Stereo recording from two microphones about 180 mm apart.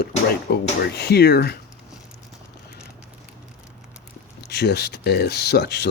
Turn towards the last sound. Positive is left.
turn(degrees=65)  # may be behind; listen again after turning